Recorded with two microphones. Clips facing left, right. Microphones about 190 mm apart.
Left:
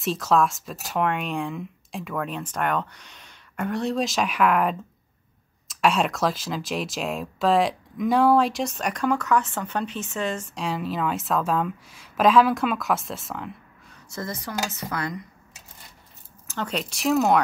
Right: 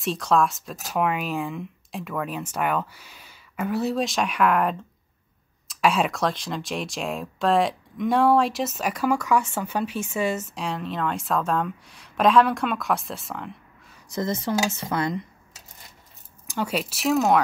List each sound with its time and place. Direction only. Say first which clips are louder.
0.0 s speech: even; centre (ahead or behind)
14.0 s speech: right 6 dB; 20° right (ahead or behind)
16.4 s speech: right 2 dB; 10° right (ahead or behind)